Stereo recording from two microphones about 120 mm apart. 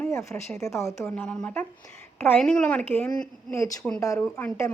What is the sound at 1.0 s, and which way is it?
A woman's voice, 10° left (ahead or behind).